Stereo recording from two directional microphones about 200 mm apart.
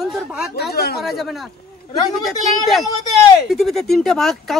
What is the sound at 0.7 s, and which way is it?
Speech, 50° left (ahead or behind).